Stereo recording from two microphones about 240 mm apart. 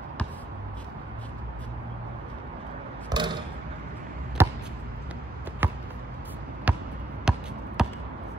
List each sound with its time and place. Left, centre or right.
3.1 s a sound: centre
4.4 s chop: centre
5.6 s basketball bounce: centre